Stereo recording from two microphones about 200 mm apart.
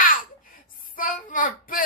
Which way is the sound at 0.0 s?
45° left (ahead or behind).